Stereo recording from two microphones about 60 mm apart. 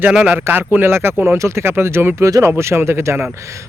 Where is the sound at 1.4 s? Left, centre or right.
Right.